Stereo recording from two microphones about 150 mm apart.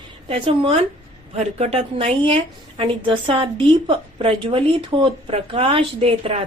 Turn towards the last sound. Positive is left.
turn(degrees=-40)  # may be behind; listen again after turning